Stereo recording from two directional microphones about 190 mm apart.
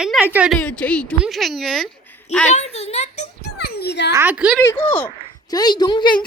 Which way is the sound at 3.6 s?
60° left (ahead or behind).